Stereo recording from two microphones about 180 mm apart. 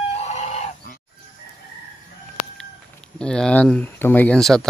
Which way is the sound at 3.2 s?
5° left (ahead or behind).